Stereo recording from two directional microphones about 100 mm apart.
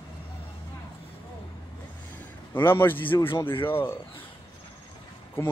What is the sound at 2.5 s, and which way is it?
Speech, 20° left (ahead or behind).